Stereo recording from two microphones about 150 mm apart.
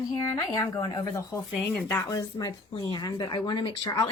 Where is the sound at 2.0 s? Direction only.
25° left (ahead or behind).